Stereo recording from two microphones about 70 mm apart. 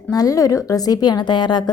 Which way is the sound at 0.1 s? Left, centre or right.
Left.